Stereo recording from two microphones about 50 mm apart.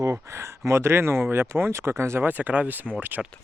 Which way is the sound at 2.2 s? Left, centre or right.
Right.